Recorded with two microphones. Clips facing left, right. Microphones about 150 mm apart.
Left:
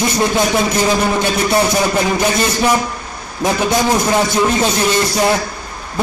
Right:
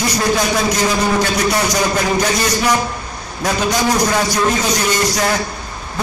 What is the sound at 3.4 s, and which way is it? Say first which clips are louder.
A man's voice: left 2 dB; 25° left (ahead or behind).